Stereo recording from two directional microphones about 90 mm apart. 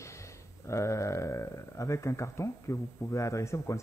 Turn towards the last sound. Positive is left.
turn(degrees=35)  # may be behind; listen again after turning